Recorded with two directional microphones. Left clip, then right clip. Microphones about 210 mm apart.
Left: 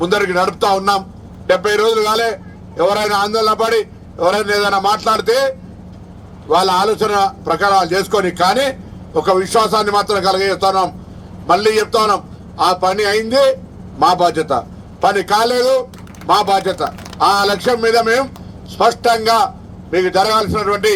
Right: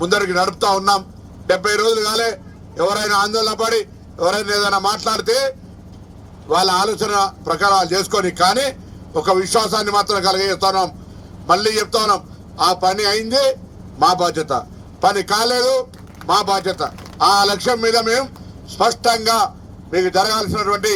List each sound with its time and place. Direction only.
0.0 s a man's voice: 25° right (ahead or behind)